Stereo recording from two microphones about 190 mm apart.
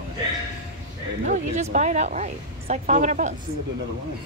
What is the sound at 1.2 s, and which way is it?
Speech, 40° right (ahead or behind).